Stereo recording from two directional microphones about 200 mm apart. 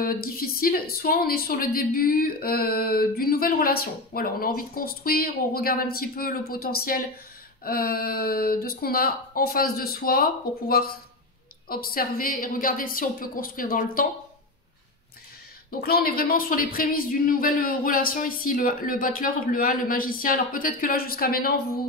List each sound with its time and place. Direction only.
0.0 s speech: 45° left (ahead or behind)
15.7 s speech: 50° left (ahead or behind)